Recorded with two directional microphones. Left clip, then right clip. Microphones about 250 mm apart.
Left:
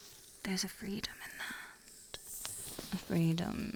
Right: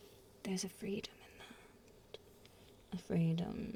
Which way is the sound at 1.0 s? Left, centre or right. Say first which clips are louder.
Left 10 dB; left.